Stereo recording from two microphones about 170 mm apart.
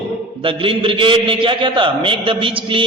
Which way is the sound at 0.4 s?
30° right (ahead or behind).